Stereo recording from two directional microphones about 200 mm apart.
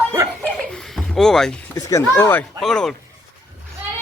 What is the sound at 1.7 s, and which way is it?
Speech, 15° left (ahead or behind).